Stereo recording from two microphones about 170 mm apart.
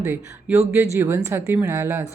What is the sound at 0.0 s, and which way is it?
Speech, 15° right (ahead or behind).